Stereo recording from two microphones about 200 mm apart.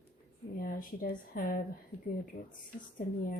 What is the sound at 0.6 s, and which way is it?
A woman's voice, 45° left (ahead or behind).